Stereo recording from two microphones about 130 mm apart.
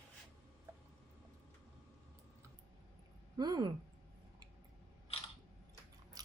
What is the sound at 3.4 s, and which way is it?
Speech, 35° right (ahead or behind).